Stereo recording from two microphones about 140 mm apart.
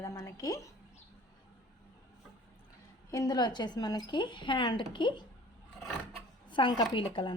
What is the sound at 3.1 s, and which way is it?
Speech, 30° left (ahead or behind).